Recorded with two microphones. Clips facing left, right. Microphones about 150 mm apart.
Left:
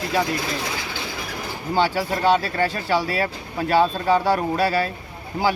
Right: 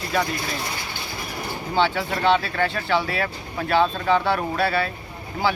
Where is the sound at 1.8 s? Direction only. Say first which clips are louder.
Left 1 dB; 40° left (ahead or behind).